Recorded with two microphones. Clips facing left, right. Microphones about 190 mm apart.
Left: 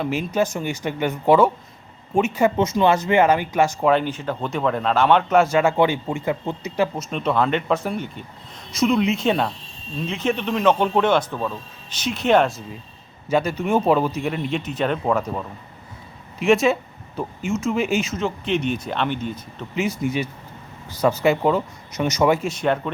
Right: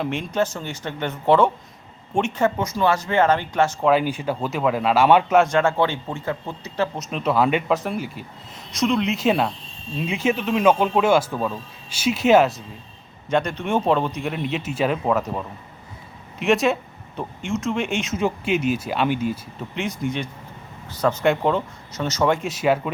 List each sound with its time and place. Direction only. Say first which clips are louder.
0.0 s speech: left 1 dB; 5° left (ahead or behind)
2.6 s speech: left 3 dB; 20° left (ahead or behind)
3.8 s speech: even; 5° right (ahead or behind)
5.4 s speech: left 1 dB; 5° left (ahead or behind)
6.9 s speech: even; centre (ahead or behind)
18.2 s speech: right 1 dB; 10° right (ahead or behind)
21.9 s speech: left 2 dB; 15° left (ahead or behind)
22.4 s speech: right 1 dB; centre (ahead or behind)